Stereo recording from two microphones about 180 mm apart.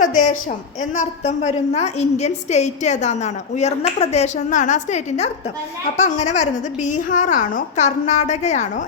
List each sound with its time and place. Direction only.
0.0 s a woman's voice: 45° left (ahead or behind)